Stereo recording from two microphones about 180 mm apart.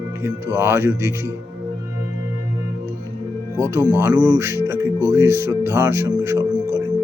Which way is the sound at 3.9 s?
15° right (ahead or behind).